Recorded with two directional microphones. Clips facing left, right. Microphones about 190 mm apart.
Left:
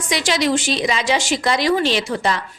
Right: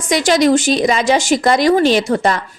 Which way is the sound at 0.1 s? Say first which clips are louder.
Right 7 dB; 45° right (ahead or behind).